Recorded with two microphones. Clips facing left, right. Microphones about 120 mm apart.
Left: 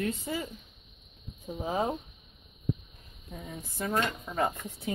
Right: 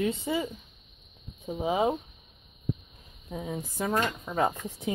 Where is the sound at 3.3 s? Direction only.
70° right (ahead or behind).